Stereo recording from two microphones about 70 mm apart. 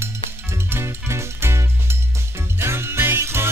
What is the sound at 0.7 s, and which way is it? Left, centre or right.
Music, right.